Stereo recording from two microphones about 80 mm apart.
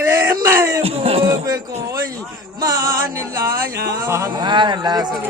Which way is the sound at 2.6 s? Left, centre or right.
Right.